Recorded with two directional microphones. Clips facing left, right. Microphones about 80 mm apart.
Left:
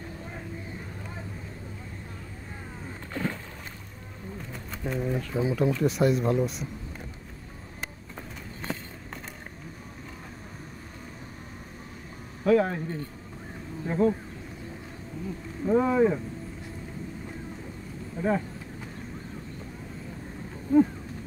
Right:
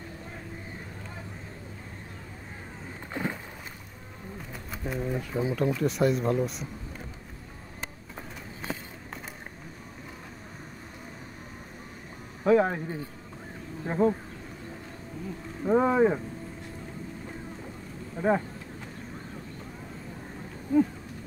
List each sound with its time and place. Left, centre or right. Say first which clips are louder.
3.1 s walk: left 1 dB; centre
4.5 s run: left 2 dB; centre
5.3 s speech: left 2 dB; centre
8.7 s a sound: left 1 dB; centre
12.4 s speech: even; right
15.6 s speech: even; right
18.2 s speech: right 2 dB; right